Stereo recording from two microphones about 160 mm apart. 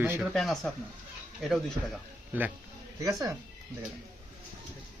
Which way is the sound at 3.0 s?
20° right (ahead or behind).